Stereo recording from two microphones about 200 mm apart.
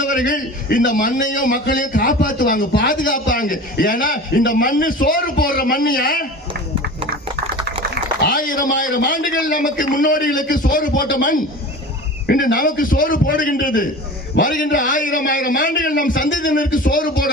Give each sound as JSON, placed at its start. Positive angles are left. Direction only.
{"t": 0.0, "sound": "a man's voice", "side_deg": 40}
{"t": 8.3, "sound": "a man's voice", "side_deg": 45}